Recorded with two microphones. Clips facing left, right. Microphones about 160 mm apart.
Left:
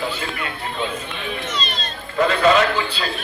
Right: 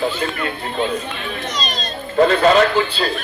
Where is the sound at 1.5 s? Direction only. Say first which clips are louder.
Right 3 dB; 40° right (ahead or behind).